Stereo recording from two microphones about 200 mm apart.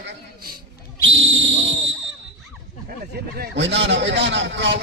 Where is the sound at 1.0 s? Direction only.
70° right (ahead or behind).